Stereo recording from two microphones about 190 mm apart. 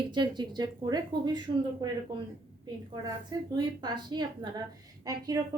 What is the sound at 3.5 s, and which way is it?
A woman's voice, 20° right (ahead or behind).